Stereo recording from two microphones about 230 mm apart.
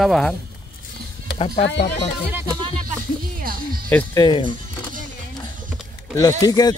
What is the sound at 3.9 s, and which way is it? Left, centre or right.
Speech, centre.